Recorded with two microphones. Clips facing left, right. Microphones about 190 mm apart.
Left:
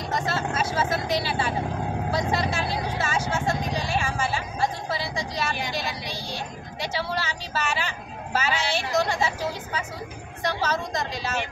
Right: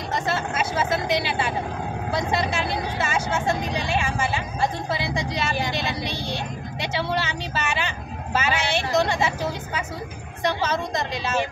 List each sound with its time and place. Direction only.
0.3 s vehicle: 20° right (ahead or behind)
10.4 s speech: 20° right (ahead or behind)